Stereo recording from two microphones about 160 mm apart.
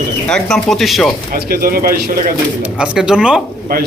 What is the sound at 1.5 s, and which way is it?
Speech, 70° right (ahead or behind).